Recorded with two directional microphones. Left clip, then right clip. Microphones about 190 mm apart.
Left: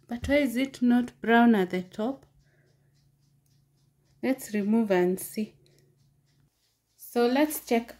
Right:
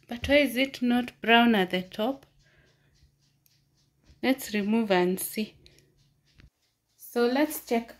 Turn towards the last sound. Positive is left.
turn(degrees=20)  # may be behind; listen again after turning